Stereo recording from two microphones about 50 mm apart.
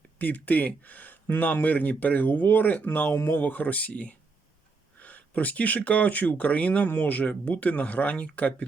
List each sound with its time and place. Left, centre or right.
0.2 s speech: left
6.8 s speech: left